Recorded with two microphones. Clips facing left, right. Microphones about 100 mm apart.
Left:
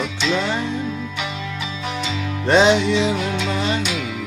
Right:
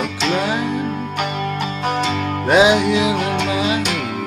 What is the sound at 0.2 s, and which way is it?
Music, 55° right (ahead or behind).